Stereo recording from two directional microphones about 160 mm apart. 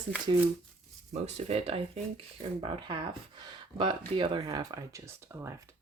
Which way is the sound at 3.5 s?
30° right (ahead or behind).